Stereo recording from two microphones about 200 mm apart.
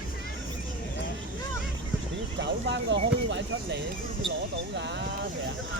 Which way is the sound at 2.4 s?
60° right (ahead or behind).